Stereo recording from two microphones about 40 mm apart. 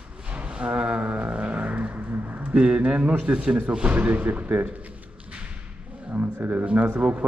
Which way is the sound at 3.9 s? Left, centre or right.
Right.